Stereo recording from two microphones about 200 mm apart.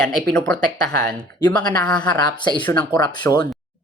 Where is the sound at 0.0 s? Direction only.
5° left (ahead or behind).